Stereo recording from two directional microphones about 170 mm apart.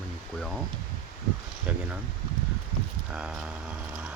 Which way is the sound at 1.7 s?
10° right (ahead or behind).